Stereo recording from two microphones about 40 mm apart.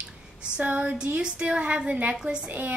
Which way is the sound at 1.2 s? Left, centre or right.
Right.